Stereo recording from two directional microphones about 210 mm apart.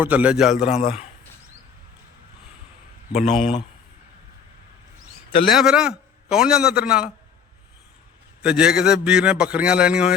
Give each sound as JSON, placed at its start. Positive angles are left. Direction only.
{"t": 0.0, "sound": "a man's voice", "side_deg": -5}
{"t": 0.6, "sound": "a man's voice", "side_deg": 30}
{"t": 3.1, "sound": "a man's voice", "side_deg": 30}
{"t": 5.5, "sound": "a man's voice", "side_deg": -5}
{"t": 8.4, "sound": "a man's voice", "side_deg": -5}